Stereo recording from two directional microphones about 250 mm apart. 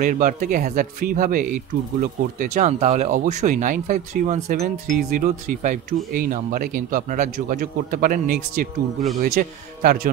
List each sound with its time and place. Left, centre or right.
0.0 s speech: right